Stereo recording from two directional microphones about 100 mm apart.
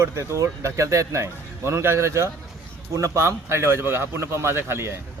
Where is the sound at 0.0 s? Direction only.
30° right (ahead or behind).